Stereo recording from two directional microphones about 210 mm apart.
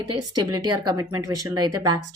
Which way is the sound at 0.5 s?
90° right.